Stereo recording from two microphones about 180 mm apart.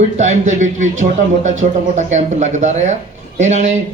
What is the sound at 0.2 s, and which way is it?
A man's voice, 40° right (ahead or behind).